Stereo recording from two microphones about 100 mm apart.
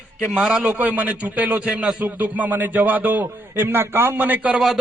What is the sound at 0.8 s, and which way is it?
Speech, 15° right (ahead or behind).